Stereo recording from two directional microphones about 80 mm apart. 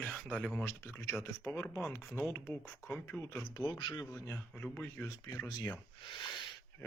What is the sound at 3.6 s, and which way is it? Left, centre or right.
Speech, left.